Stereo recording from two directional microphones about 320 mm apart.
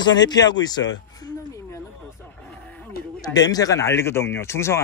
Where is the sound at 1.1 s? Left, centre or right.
Centre.